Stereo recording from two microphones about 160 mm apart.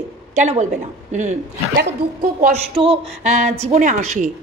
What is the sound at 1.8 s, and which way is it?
Speech, 80° right.